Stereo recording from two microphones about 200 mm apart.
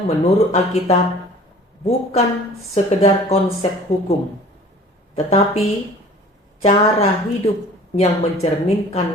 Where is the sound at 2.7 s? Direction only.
30° left (ahead or behind).